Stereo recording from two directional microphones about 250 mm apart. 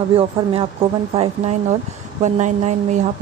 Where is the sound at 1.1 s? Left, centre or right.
Right.